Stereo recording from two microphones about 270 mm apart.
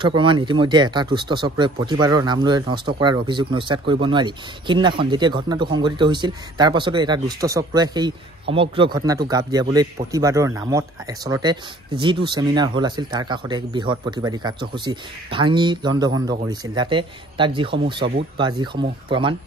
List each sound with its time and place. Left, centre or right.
0.0 s speech: centre